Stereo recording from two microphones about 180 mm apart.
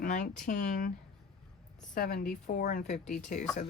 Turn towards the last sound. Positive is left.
turn(degrees=45)  # may be behind; listen again after turning